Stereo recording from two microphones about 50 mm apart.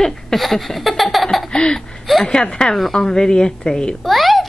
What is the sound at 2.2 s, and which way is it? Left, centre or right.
A woman's voice, centre.